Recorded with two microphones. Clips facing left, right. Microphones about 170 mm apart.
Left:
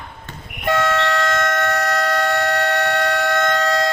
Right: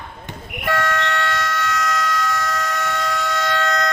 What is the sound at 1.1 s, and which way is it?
Siren, 45° left (ahead or behind).